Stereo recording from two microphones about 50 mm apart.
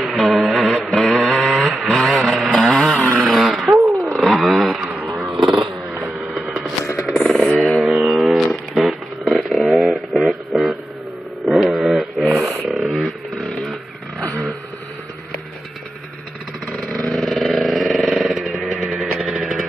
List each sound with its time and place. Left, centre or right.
0.0 s music: centre
0.9 s vehicle: centre
3.2 s a sound: centre
3.8 s wild animals: centre
5.9 s vehicle: right
7.1 s a sound: centre
16.8 s vehicle: centre